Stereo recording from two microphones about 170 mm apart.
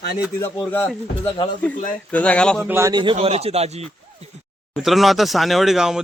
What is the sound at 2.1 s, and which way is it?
Speech, 5° left (ahead or behind).